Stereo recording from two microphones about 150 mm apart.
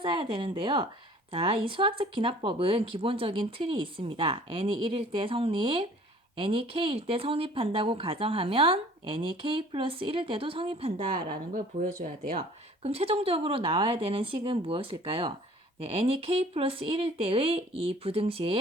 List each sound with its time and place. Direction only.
0.0 s speech: 35° right (ahead or behind)
11.5 s speech: 60° right (ahead or behind)
12.8 s speech: 40° right (ahead or behind)